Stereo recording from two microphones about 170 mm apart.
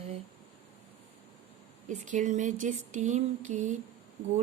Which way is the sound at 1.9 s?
45° right (ahead or behind).